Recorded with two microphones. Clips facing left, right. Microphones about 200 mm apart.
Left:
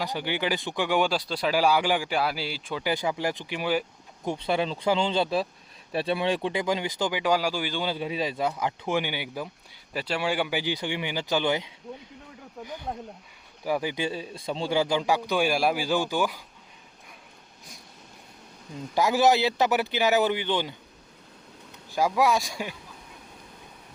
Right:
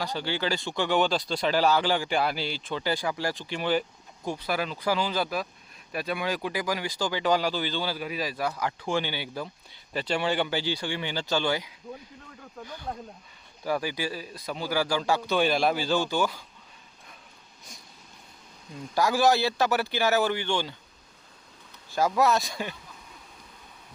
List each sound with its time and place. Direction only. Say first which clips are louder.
0.0 s speech: left 1 dB; 15° left (ahead or behind)
4.3 s speech: left 3 dB; 25° left (ahead or behind)
18.9 s speech: left 1 dB; 20° left (ahead or behind)
21.9 s speech: even; 10° left (ahead or behind)